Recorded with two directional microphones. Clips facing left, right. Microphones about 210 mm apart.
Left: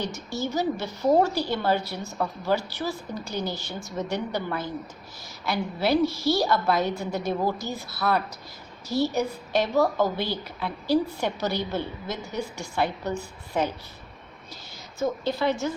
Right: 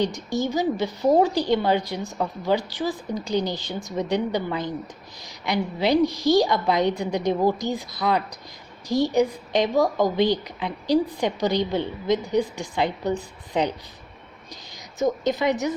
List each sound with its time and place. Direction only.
0.1 s a woman's voice: 15° right (ahead or behind)
14.9 s a woman's voice: 15° right (ahead or behind)